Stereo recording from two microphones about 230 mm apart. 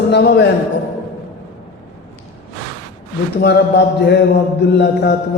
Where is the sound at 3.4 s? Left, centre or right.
Left.